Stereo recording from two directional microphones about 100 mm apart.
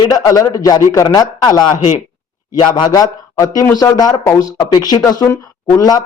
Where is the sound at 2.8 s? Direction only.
40° left (ahead or behind).